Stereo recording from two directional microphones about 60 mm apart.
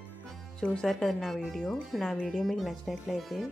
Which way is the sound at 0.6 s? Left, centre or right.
Centre.